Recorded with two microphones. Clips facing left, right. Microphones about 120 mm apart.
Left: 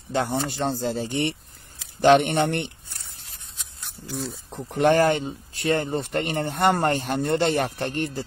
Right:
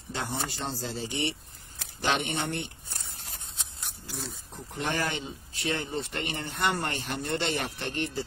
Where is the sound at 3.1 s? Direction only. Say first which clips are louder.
Right 3 dB; 50° right (ahead or behind).